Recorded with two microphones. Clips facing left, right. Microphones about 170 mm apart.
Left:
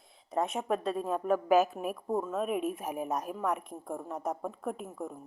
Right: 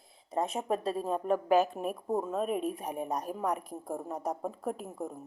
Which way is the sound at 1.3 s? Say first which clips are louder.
Left 1 dB; 5° left (ahead or behind).